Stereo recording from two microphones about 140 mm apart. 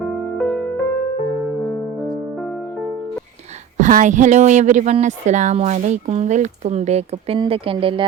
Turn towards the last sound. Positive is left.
turn(degrees=-40)  # may be behind; listen again after turning